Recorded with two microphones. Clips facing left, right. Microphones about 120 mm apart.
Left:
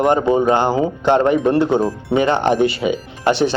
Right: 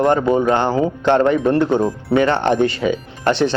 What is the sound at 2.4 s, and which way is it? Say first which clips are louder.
Speech: left 1 dB; 10° left (ahead or behind).